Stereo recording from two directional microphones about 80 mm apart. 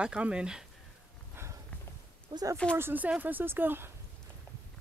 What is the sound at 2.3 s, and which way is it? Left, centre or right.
Speech, right.